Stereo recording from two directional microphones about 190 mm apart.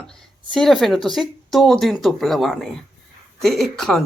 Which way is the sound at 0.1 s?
Centre (ahead or behind).